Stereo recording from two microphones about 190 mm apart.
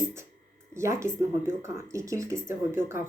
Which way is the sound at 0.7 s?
15° right (ahead or behind).